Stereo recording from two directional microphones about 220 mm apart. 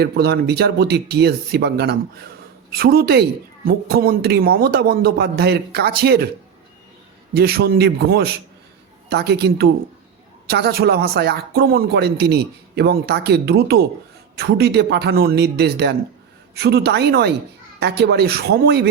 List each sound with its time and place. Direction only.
0.0 s speech: 50° right (ahead or behind)
7.3 s speech: 45° right (ahead or behind)